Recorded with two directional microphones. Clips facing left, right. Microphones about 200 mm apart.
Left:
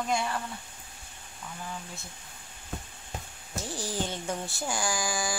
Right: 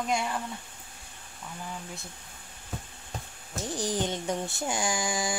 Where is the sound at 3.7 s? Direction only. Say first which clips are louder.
Right 4 dB; 20° right (ahead or behind).